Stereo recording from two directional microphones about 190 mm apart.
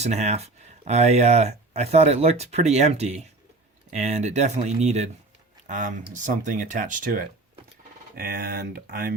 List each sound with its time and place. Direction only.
0.0 s speech: 35° right (ahead or behind)